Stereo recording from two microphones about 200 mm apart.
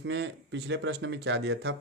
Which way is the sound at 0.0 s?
60° right (ahead or behind).